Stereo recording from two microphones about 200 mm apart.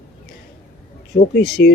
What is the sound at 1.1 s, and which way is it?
Speech, 55° left (ahead or behind).